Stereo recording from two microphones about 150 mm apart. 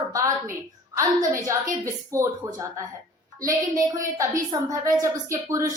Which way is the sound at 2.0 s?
20° right (ahead or behind).